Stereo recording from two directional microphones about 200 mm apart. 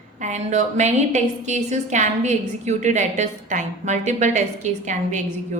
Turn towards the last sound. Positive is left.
turn(degrees=-35)  # may be behind; listen again after turning